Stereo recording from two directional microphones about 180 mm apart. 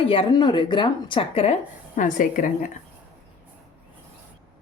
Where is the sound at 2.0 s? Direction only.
45° left (ahead or behind).